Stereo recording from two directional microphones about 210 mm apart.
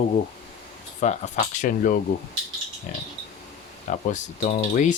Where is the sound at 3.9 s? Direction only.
35° left (ahead or behind).